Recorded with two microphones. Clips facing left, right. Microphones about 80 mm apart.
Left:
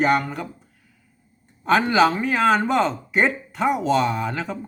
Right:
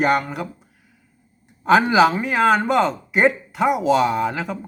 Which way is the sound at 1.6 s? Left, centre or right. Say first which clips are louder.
Right 3 dB; centre.